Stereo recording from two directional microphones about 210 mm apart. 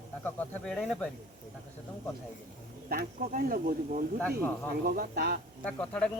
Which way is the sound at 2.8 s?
40° right (ahead or behind).